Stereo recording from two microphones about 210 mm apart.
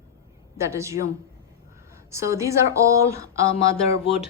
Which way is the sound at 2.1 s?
15° right (ahead or behind).